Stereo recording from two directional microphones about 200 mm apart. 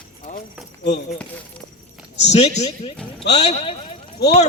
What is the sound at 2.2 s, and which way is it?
A man's voice, 35° left (ahead or behind).